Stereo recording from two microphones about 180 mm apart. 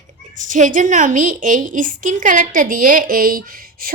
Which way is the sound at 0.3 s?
45° right (ahead or behind).